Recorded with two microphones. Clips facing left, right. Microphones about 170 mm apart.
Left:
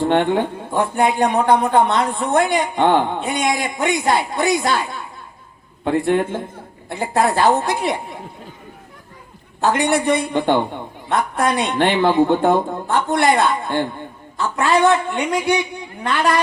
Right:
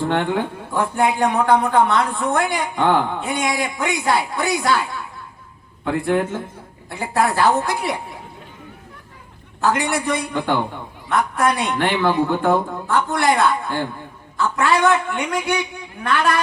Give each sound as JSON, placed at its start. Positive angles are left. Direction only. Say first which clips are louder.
{"t": 0.1, "sound": "a man's voice", "louder": "left 4 dB", "side_deg": 25}
{"t": 9.6, "sound": "a man's voice", "louder": "left 3 dB", "side_deg": 25}